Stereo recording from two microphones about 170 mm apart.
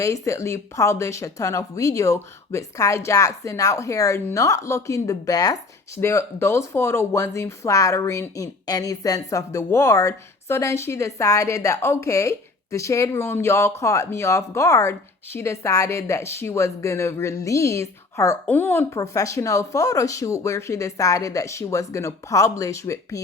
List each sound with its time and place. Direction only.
0.0 s a woman's voice: 15° left (ahead or behind)